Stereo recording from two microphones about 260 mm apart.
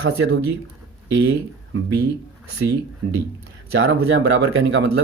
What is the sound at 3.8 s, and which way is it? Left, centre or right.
Speech, right.